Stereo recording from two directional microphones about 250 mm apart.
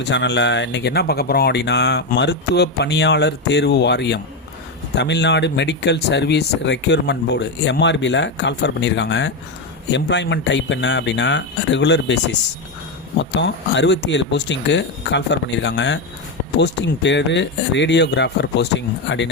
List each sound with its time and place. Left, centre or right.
0.0 s speech: left